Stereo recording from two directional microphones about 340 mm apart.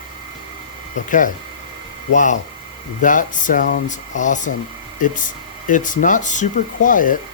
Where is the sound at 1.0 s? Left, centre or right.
Left.